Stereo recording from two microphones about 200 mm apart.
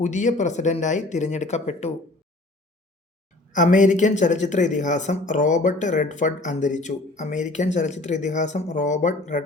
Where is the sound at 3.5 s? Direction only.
40° left (ahead or behind).